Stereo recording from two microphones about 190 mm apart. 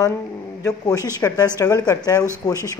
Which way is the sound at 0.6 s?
20° left (ahead or behind).